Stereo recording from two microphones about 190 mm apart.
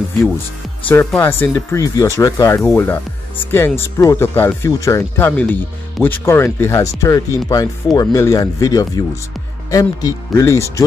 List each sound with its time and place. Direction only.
0.8 s speech: 10° left (ahead or behind)